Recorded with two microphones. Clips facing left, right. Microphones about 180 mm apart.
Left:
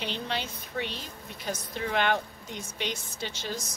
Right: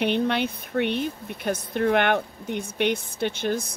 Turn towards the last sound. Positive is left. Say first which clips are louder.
# right 10 dB
turn(degrees=-55)  # may be behind; listen again after turning